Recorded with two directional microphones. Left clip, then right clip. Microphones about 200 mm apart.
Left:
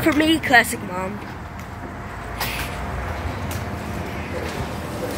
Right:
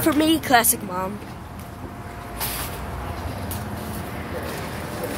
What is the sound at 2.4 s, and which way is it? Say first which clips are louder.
Vehicle: left 4 dB; 20° left (ahead or behind).